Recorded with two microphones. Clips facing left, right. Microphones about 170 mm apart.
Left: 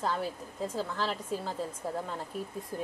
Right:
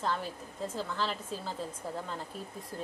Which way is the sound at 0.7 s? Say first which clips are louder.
Left 1 dB; 5° left (ahead or behind).